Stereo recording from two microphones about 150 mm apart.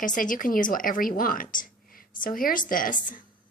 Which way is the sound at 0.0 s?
60° left (ahead or behind).